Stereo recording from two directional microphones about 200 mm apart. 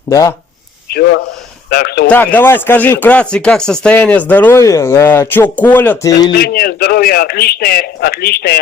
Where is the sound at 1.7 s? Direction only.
50° left (ahead or behind).